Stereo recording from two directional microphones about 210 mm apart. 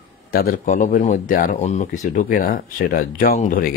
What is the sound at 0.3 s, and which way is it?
Speech, 45° left (ahead or behind).